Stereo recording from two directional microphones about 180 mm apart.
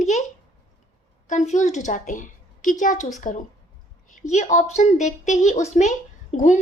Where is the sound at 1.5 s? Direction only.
40° left (ahead or behind).